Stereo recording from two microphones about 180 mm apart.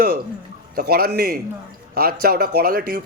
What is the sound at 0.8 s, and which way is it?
A man's voice, 60° right (ahead or behind).